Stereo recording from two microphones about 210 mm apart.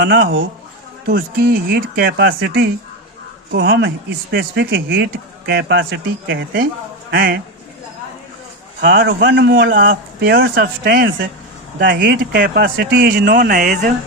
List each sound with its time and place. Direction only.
0.0 s speech: 60° right (ahead or behind)
1.0 s speech: 45° right (ahead or behind)
3.5 s speech: 55° right (ahead or behind)
8.8 s speech: 45° right (ahead or behind)
9.0 s speech: 55° right (ahead or behind)
11.8 s speech: 55° right (ahead or behind); by 13.9 s 40° right (ahead or behind)